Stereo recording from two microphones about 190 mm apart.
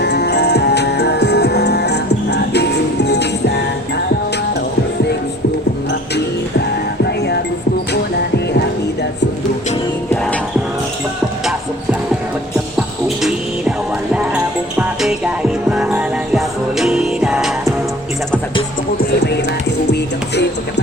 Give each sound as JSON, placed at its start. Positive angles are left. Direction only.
{"t": 0.0, "sound": "music", "side_deg": 60}
{"t": 7.0, "sound": "music", "side_deg": 60}
{"t": 13.2, "sound": "music", "side_deg": -5}